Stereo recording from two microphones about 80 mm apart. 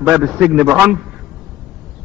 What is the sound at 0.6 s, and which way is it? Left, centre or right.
Speech, centre.